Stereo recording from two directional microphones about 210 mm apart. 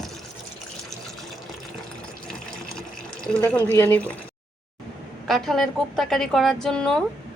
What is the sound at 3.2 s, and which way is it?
Speech, 5° left (ahead or behind).